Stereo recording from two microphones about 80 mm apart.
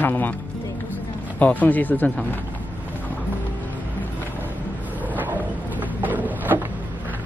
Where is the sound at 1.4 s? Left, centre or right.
Left.